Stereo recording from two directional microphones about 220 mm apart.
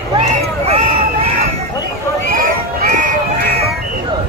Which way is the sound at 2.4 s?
40° right (ahead or behind).